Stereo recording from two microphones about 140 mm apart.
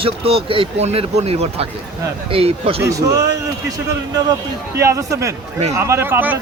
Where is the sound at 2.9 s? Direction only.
25° right (ahead or behind).